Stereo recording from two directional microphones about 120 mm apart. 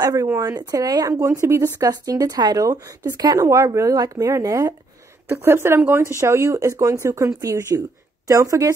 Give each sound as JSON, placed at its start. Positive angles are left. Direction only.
{"t": 0.0, "sound": "speech", "side_deg": -30}
{"t": 5.3, "sound": "speech", "side_deg": -20}